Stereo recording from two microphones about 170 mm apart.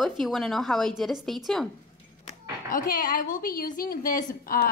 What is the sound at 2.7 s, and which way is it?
A woman's voice, 55° left (ahead or behind).